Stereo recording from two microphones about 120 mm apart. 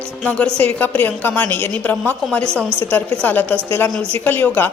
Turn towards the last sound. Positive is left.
turn(degrees=15)  # may be behind; listen again after turning